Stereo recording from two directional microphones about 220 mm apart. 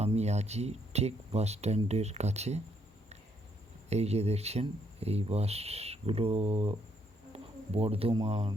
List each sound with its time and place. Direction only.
0.0 s speech: 30° right (ahead or behind)
3.8 s speech: 30° right (ahead or behind)